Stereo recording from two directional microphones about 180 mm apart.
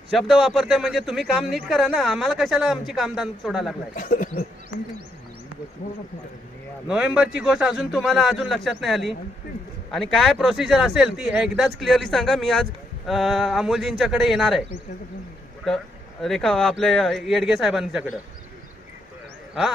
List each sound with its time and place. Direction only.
0.1 s speech: centre (ahead or behind)
3.9 s speech: 45° left (ahead or behind)
6.9 s speech: 5° right (ahead or behind)
15.6 s speech: centre (ahead or behind)